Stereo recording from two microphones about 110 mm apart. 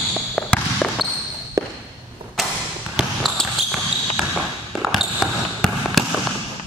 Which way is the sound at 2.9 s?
Centre (ahead or behind).